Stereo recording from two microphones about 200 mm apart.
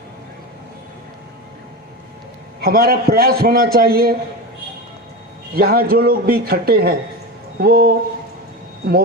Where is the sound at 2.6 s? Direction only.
50° right (ahead or behind).